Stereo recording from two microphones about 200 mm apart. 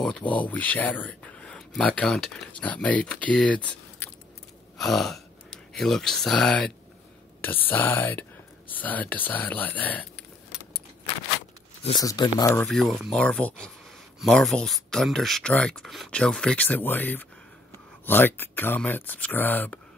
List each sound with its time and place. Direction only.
0.4 s speech: 10° left (ahead or behind)
4.0 s keys jangling: 10° left (ahead or behind)
4.7 s speech: centre (ahead or behind)
12.0 s speech: 20° left (ahead or behind)
12.6 s speech: centre (ahead or behind)